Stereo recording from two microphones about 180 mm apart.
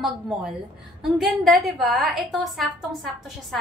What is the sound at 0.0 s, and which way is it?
A woman's voice, centre (ahead or behind).